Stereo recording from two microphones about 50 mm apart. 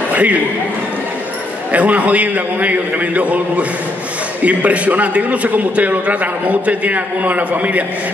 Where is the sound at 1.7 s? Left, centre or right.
Right.